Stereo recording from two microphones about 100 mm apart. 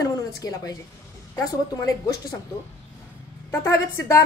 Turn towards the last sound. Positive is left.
turn(degrees=30)  # may be behind; listen again after turning